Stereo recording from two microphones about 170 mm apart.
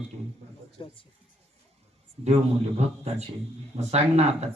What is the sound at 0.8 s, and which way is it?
Speech, 30° left (ahead or behind).